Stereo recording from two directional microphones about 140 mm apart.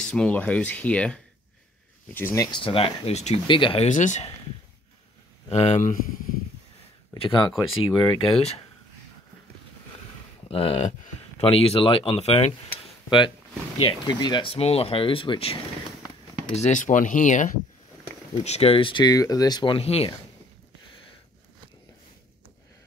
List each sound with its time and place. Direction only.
0.1 s speech: 10° left (ahead or behind)
2.1 s speech: 20° left (ahead or behind)
2.6 s speech: 40° left (ahead or behind)
3.4 s speech: 35° left (ahead or behind)
3.8 s speech: 60° left (ahead or behind)
5.5 s speech: 50° left (ahead or behind); by 6.1 s 65° left (ahead or behind)
7.2 s speech: 35° left (ahead or behind)
10.5 s speech: 45° left (ahead or behind)
13.7 s speech: 35° left (ahead or behind)
16.6 s speech: 65° left (ahead or behind)
18.4 s speech: 50° left (ahead or behind)